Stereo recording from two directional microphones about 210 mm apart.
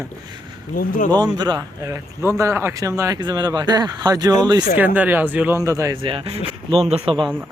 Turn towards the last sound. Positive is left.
turn(degrees=-25)  # may be behind; listen again after turning